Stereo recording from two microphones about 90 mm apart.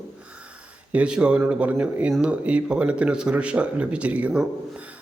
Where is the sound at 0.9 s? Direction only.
15° right (ahead or behind).